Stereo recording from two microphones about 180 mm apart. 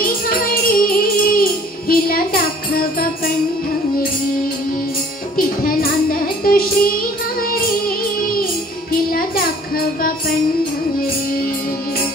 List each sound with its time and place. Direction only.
0.0 s music: 55° left (ahead or behind)
5.4 s music: 55° left (ahead or behind)
8.9 s music: 55° left (ahead or behind)